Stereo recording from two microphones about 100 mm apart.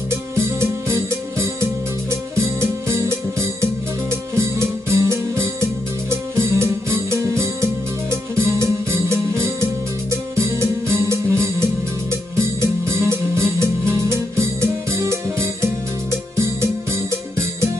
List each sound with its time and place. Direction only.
0.6 s music: 25° right (ahead or behind)